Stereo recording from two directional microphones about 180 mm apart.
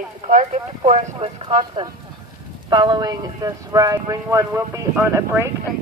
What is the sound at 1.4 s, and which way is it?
Speech, 25° right (ahead or behind).